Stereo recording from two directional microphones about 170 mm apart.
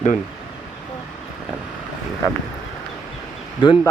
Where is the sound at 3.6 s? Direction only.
30° left (ahead or behind).